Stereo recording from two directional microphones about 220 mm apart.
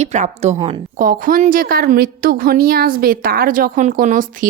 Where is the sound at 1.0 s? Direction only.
40° right (ahead or behind).